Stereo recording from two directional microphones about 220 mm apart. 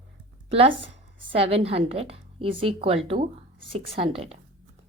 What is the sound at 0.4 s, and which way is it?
A woman's voice, 25° right (ahead or behind).